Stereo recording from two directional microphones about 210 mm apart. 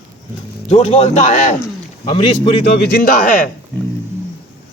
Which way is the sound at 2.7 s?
45° left (ahead or behind).